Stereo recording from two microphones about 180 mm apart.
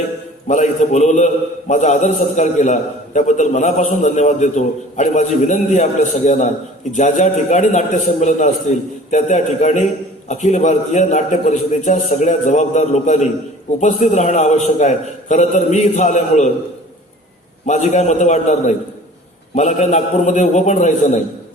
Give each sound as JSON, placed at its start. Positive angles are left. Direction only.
{"t": 0.4, "sound": "a man's voice", "side_deg": 40}
{"t": 17.7, "sound": "a man's voice", "side_deg": 40}